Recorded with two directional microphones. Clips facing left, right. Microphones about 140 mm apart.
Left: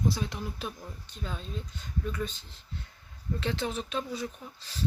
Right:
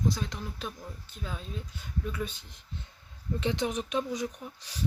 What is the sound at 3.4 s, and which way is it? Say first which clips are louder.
Speech: right 2 dB; 15° right (ahead or behind).